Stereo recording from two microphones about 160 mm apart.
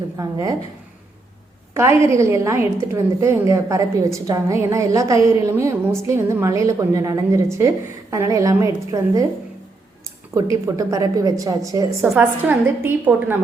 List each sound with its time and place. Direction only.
0.2 s a woman's voice: 20° right (ahead or behind)
1.7 s a woman's voice: 15° right (ahead or behind)
10.3 s a woman's voice: 20° right (ahead or behind)
12.1 s a woman's voice: 10° right (ahead or behind)